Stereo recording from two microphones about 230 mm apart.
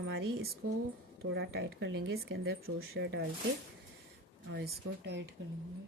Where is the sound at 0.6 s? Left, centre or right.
Right.